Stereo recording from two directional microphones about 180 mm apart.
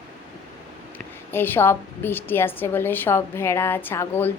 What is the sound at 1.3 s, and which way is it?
A woman's voice, 10° left (ahead or behind).